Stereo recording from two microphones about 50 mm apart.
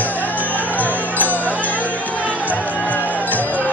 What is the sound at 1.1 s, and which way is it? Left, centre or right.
Music, left.